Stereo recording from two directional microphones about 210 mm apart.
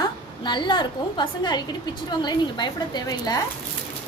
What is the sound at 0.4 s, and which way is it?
A woman's voice, 20° left (ahead or behind).